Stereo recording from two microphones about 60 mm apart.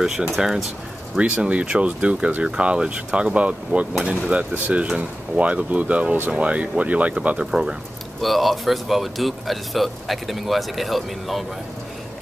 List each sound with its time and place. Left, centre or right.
0.4 s speech: centre
1.1 s speech: centre
8.2 s speech: centre